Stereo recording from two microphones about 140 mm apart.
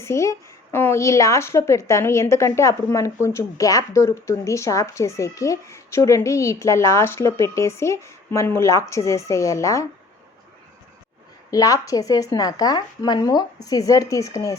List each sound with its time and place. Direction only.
0.0 s a woman's voice: 20° left (ahead or behind)
11.5 s a woman's voice: 25° left (ahead or behind)